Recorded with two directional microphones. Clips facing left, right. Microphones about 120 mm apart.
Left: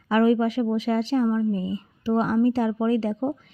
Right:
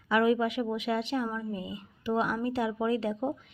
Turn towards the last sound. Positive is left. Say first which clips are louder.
# left 6 dB
turn(degrees=35)  # may be behind; listen again after turning